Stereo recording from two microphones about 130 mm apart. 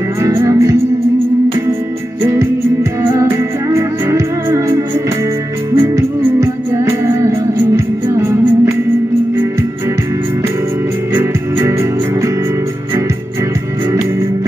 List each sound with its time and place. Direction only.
0.2 s music: 20° right (ahead or behind)
2.2 s music: 20° right (ahead or behind)
11.1 s music: 20° right (ahead or behind)